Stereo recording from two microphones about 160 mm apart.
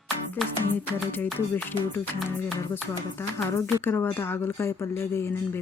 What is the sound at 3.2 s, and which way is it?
Speech, 15° left (ahead or behind).